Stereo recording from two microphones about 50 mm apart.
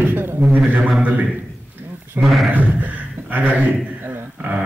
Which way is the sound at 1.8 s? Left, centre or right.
Right.